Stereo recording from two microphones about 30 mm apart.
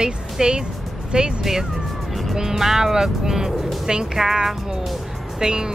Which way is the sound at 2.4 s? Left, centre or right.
Centre.